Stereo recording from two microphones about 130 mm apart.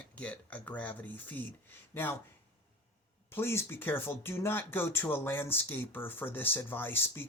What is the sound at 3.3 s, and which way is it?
Speech, 20° left (ahead or behind).